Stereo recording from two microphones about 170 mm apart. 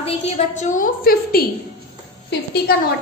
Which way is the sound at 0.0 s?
40° left (ahead or behind).